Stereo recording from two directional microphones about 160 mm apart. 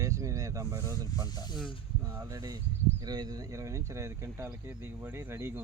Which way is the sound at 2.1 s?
20° right (ahead or behind).